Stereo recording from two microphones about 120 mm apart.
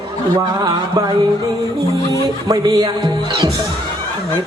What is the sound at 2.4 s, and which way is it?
Speech, 35° right (ahead or behind).